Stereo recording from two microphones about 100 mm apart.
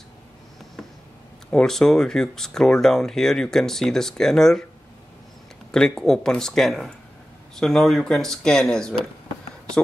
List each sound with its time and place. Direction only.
1.5 s speech: 5° left (ahead or behind)
5.7 s speech: 5° left (ahead or behind)